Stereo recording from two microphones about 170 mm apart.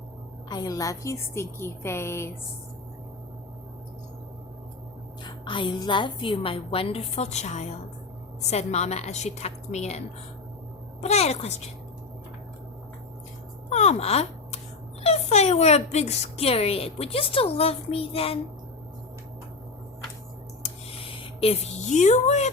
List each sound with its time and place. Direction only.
0.4 s a woman's voice: 25° left (ahead or behind)
5.2 s a woman's voice: 30° left (ahead or behind)
11.0 s a woman's voice: 40° left (ahead or behind)
13.7 s a sound: 40° left (ahead or behind)
15.0 s a woman's voice: 40° left (ahead or behind)
20.6 s a sound: 30° left (ahead or behind)